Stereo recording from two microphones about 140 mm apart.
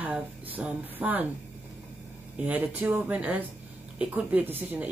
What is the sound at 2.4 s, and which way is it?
Speech, 10° right (ahead or behind).